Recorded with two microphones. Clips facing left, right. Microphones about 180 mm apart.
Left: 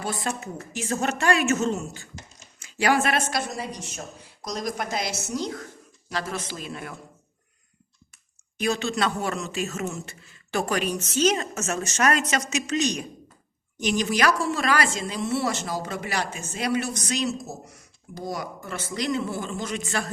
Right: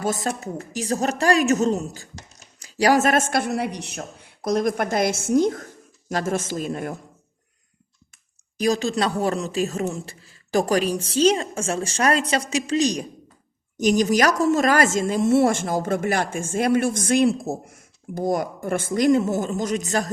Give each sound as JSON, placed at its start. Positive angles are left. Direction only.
{"t": 0.0, "sound": "a woman's voice", "side_deg": -45}
{"t": 8.5, "sound": "a woman's voice", "side_deg": -35}